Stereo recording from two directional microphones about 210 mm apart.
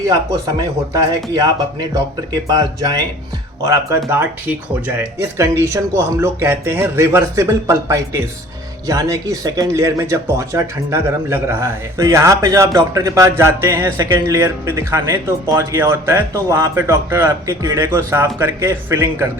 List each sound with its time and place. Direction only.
0.1 s speech: 15° right (ahead or behind)